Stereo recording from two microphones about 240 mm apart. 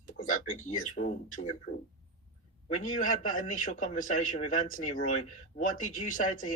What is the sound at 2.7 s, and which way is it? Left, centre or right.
A man's voice, left.